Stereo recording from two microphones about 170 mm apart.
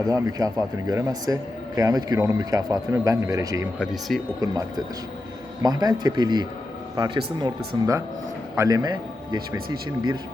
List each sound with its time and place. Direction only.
0.1 s a man's voice: 20° right (ahead or behind)
4.1 s speech: 5° left (ahead or behind)
5.6 s a man's voice: 25° right (ahead or behind)